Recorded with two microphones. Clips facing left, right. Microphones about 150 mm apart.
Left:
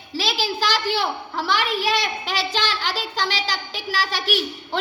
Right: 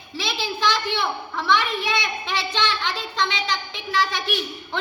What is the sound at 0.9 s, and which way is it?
Speech, 35° left (ahead or behind).